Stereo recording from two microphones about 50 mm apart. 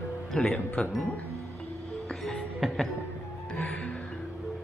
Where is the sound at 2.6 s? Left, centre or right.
Centre.